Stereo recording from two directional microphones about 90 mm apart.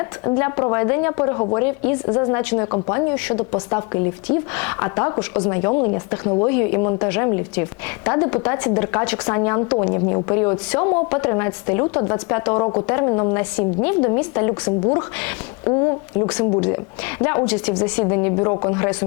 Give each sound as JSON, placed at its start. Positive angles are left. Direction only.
{"t": 0.0, "sound": "speech", "side_deg": 25}